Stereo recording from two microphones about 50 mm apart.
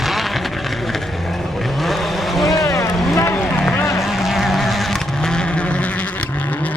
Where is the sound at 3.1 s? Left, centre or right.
Left.